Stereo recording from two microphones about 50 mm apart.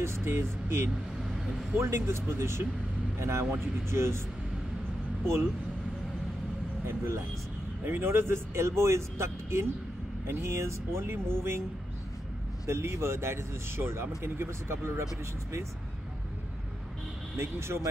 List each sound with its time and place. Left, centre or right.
0.0 s speech: right
5.2 s speech: right
6.9 s speech: right
7.8 s speech: right
12.6 s speech: right
17.4 s speech: right